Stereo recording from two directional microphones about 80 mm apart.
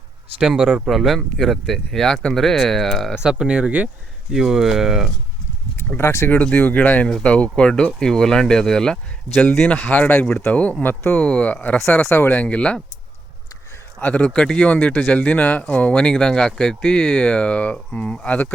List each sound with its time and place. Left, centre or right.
0.4 s speech: centre
3.2 s speech: centre
4.3 s speech: centre
6.0 s speech: left
6.3 s speech: centre
9.9 s speech: left
12.0 s speech: left; by 12.8 s centre
14.0 s speech: centre